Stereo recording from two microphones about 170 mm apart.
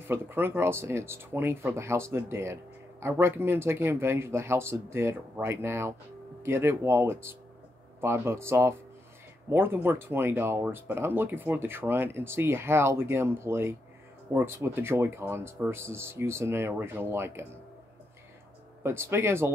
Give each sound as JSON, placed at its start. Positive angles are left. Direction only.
{"t": 0.1, "sound": "speech", "side_deg": -10}
{"t": 18.8, "sound": "speech", "side_deg": -15}